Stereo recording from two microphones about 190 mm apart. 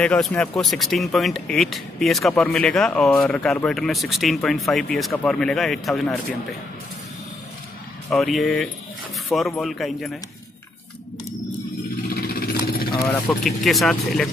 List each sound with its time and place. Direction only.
0.0 s speech: 5° left (ahead or behind)
8.1 s speech: centre (ahead or behind)
12.1 s vehicle: 50° left (ahead or behind)
12.9 s speech: 15° left (ahead or behind)
13.4 s speech: centre (ahead or behind)